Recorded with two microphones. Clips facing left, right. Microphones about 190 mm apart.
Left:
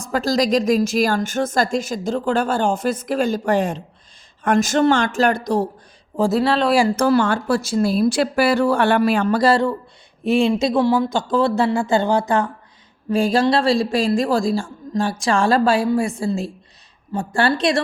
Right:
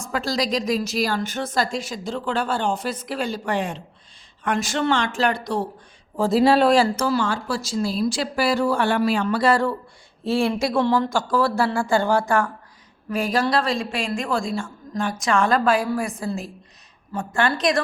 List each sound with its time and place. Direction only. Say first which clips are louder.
0.0 s speech: left 5 dB; 40° left (ahead or behind)
6.4 s speech: right 2 dB; 15° right (ahead or behind)
6.9 s speech: left 6 dB; 55° left (ahead or behind)
10.2 s speech: left 4 dB; 15° left (ahead or behind)